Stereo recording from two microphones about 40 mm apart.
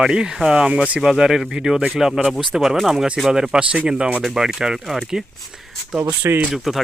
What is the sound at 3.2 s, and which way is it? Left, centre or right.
Speech, centre.